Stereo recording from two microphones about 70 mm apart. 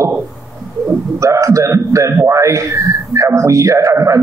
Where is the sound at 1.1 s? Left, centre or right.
Right.